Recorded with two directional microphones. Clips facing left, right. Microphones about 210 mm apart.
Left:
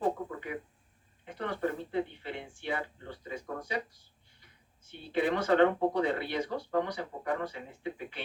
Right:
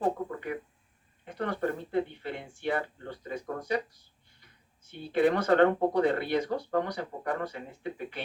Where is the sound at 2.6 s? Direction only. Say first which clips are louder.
Right 7 dB; 50° right (ahead or behind).